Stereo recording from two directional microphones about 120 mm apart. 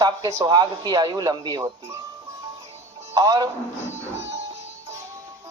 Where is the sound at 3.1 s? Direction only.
30° right (ahead or behind).